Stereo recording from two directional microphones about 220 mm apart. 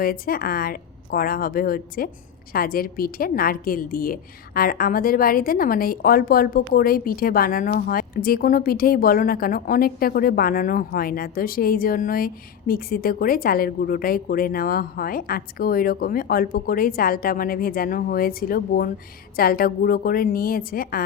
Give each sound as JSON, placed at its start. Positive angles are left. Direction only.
{"t": 0.0, "sound": "a woman's voice", "side_deg": 40}